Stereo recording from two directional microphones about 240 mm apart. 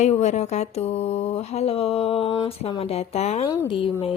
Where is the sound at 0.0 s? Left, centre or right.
Left.